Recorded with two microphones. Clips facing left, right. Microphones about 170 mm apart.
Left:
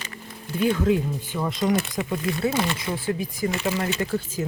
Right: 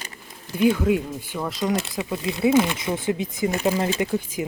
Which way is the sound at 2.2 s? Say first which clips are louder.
Right 7 dB; 20° right (ahead or behind).